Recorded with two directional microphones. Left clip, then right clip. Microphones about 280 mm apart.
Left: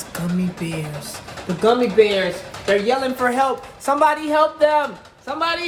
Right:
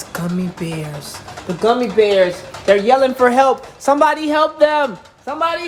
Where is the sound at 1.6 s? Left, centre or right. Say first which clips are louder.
Right 1 dB; centre.